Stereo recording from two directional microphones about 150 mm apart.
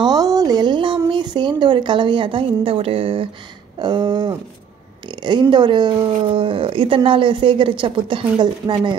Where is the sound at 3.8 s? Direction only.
30° right (ahead or behind).